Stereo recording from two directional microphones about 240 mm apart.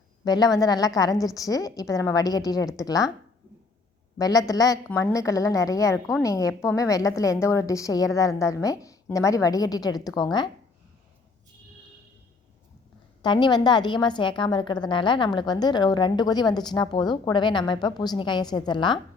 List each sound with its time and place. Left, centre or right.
0.3 s a woman's voice: centre
4.2 s a woman's voice: centre
13.2 s a woman's voice: centre